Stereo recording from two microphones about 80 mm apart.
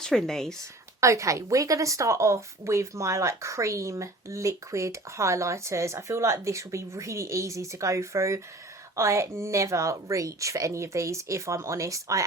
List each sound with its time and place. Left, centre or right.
0.0 s speech: centre
0.6 s a woman's voice: right